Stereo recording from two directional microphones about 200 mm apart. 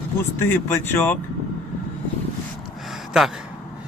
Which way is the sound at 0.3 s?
10° left (ahead or behind).